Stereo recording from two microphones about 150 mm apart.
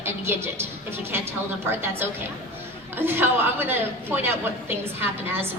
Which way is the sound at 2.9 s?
15° right (ahead or behind).